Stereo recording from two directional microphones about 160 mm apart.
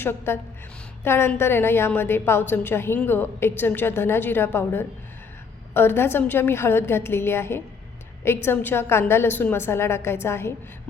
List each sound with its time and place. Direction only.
0.0 s a woman's voice: 15° left (ahead or behind)